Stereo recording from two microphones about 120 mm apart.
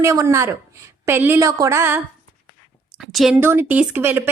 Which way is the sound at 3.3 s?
20° right (ahead or behind).